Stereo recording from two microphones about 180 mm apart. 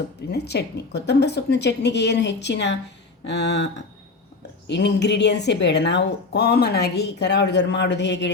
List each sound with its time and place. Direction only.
0.3 s a woman's voice: 65° left (ahead or behind)